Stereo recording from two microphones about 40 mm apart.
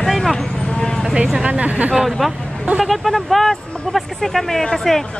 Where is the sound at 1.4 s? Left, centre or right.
Right.